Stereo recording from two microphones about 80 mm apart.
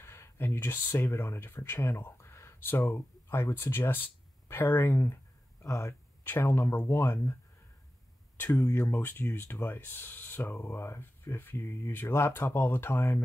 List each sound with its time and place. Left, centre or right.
0.0 s speech: left
8.4 s speech: left
8.6 s speech: left
8.9 s speech: left